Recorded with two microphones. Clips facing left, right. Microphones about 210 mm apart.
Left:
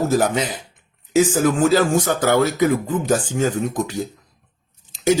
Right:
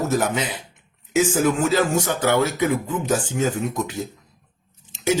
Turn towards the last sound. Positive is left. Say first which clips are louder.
# left 4 dB
turn(degrees=35)  # may be behind; listen again after turning